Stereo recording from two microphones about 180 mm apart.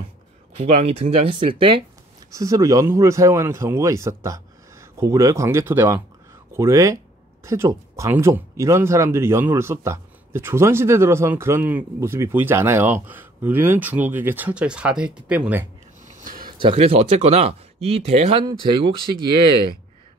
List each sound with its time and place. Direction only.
0.6 s speech: 35° right (ahead or behind)
2.3 s speech: 20° right (ahead or behind)
16.1 s a sound: 50° right (ahead or behind)
16.4 s speech: 30° right (ahead or behind)
18.4 s speech: 25° right (ahead or behind)